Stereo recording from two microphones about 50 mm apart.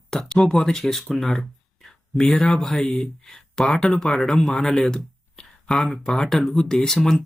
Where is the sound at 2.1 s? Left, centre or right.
Centre.